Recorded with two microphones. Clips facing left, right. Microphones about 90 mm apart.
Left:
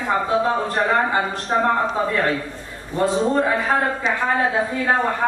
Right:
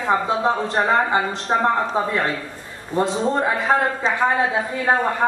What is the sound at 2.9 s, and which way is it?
Speech, 20° right (ahead or behind).